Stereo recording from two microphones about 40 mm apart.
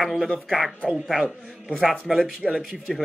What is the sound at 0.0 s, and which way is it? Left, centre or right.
Speech, centre.